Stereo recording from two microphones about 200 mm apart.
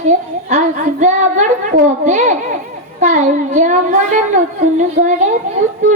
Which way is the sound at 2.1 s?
40° right (ahead or behind).